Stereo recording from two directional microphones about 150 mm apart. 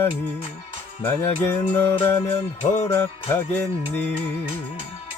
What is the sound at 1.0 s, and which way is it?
Music, 15° left (ahead or behind).